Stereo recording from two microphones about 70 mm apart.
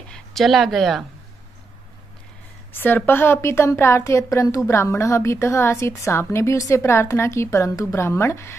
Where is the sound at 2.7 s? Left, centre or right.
Left.